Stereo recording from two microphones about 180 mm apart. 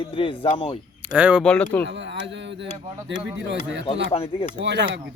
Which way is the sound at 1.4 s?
10° left (ahead or behind).